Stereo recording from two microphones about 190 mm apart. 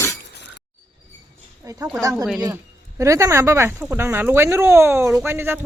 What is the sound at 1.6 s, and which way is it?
Speech, 20° right (ahead or behind).